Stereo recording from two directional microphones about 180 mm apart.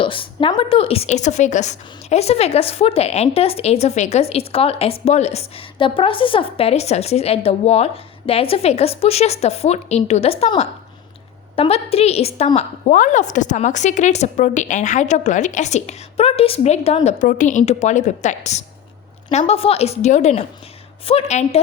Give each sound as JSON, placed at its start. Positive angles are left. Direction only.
{"t": 0.0, "sound": "a woman's voice", "side_deg": 30}
{"t": 12.5, "sound": "a woman's voice", "side_deg": 45}